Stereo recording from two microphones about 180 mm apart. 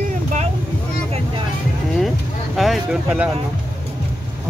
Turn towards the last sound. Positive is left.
turn(degrees=-5)  # may be behind; listen again after turning